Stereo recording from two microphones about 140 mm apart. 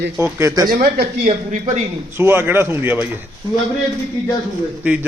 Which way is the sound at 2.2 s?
15° right (ahead or behind).